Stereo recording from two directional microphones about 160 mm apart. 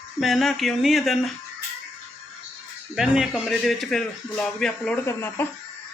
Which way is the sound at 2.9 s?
5° right (ahead or behind).